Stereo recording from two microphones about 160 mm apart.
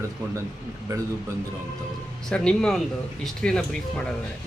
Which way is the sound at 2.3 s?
5° left (ahead or behind).